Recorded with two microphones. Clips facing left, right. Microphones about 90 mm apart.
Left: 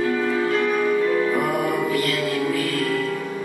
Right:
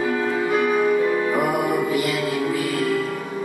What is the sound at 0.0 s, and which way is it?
Music, 10° right (ahead or behind).